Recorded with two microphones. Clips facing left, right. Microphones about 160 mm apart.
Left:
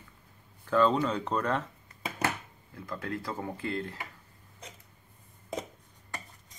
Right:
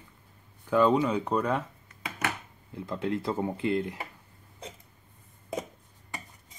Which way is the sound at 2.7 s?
20° right (ahead or behind).